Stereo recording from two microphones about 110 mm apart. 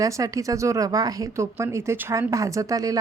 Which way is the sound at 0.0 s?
30° right (ahead or behind).